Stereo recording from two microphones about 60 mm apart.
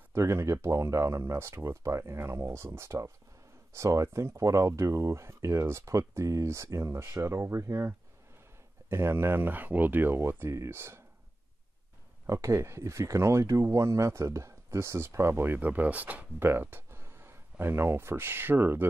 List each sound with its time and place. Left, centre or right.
0.1 s speech: right
12.3 s speech: right
16.3 s speech: right